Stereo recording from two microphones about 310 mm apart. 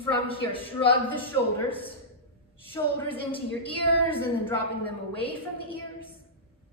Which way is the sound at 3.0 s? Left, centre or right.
Centre.